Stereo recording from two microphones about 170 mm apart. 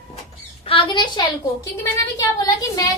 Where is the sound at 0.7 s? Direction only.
30° left (ahead or behind).